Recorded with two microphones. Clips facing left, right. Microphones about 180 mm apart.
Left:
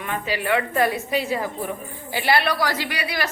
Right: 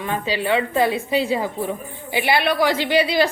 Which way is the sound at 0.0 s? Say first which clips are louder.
Right 3 dB; 30° right (ahead or behind).